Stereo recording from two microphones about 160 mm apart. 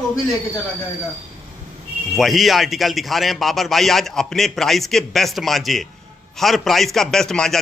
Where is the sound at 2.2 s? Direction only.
Centre (ahead or behind).